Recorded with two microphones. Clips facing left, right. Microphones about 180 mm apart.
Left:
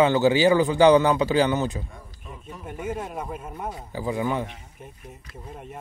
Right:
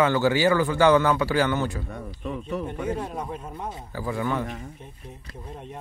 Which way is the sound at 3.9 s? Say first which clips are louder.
Left 1 dB; 15° left (ahead or behind).